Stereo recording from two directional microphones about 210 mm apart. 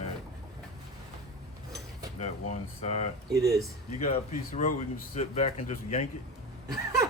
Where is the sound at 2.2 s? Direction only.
35° left (ahead or behind).